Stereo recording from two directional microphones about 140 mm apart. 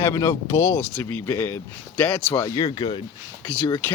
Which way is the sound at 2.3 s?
25° left (ahead or behind).